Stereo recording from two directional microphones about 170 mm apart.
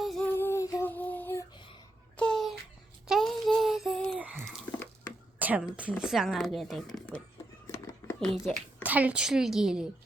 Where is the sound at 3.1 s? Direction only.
Centre (ahead or behind).